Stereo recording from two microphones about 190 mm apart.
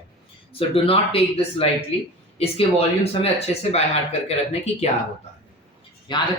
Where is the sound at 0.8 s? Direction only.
30° left (ahead or behind).